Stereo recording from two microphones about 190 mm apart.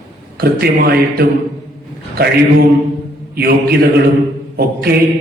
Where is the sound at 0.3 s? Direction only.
55° right (ahead or behind).